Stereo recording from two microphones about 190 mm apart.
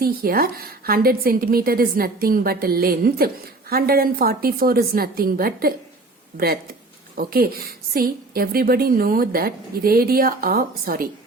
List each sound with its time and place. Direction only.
0.0 s a woman's voice: 50° right (ahead or behind)